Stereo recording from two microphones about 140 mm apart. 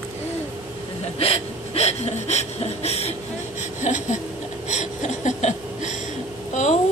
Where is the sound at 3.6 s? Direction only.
60° left (ahead or behind).